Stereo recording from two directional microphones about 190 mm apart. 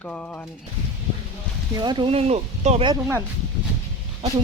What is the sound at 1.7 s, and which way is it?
Speech, 25° right (ahead or behind).